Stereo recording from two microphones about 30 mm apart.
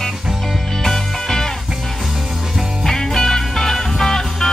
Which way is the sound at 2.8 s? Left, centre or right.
Centre.